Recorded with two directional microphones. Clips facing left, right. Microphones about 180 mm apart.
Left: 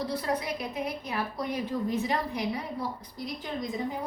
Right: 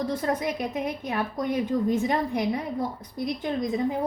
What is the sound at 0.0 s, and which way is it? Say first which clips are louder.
Speech: right 4 dB; 45° right (ahead or behind).